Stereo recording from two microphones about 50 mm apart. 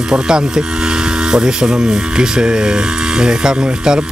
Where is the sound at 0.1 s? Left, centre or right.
Centre.